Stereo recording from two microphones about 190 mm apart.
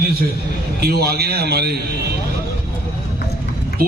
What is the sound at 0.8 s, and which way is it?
Speech, 55° right (ahead or behind).